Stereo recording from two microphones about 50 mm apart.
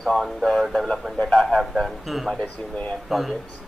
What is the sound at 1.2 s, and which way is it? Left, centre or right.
Speech, centre.